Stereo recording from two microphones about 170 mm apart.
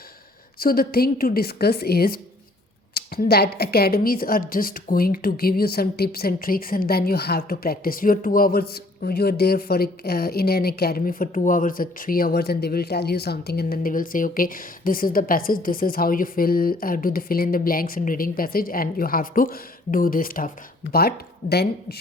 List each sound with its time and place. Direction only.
0.6 s a woman's voice: 60° left (ahead or behind)
21.5 s a woman's voice: 70° left (ahead or behind)